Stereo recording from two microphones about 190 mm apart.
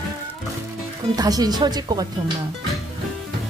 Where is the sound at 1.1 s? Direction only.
20° right (ahead or behind).